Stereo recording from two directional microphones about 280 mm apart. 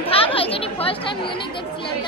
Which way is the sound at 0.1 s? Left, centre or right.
Centre.